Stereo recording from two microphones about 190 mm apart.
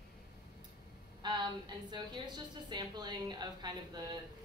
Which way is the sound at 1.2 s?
20° right (ahead or behind).